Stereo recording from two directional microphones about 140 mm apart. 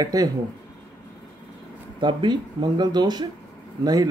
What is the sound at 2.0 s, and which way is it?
Speech, 35° right (ahead or behind).